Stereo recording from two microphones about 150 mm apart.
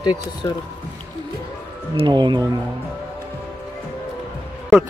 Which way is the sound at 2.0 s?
30° right (ahead or behind).